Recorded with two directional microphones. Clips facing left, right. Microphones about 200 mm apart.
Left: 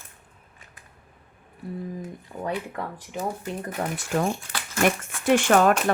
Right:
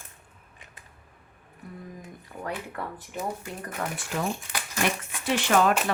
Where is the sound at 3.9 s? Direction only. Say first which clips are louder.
Left 7 dB; 45° left (ahead or behind).